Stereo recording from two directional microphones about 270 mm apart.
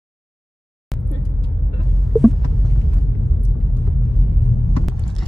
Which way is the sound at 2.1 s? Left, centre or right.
Centre.